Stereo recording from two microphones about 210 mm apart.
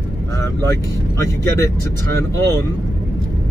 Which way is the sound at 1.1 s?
15° left (ahead or behind).